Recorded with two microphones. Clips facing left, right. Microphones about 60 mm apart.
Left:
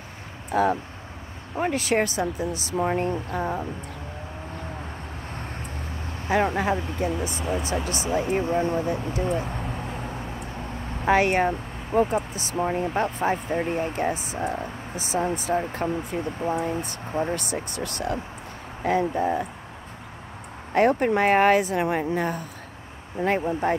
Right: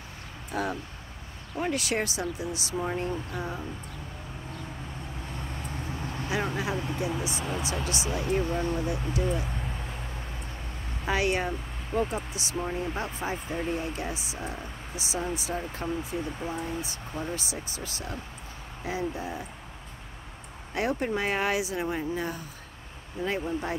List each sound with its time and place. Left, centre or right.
0.5 s speech: left
6.2 s speech: left
11.1 s speech: left
12.6 s speech: left
20.7 s speech: left
21.8 s speech: left